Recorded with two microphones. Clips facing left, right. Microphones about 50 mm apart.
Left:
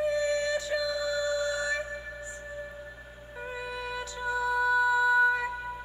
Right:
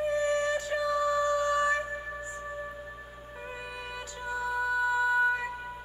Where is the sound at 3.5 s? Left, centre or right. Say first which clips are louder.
Left 6 dB; right.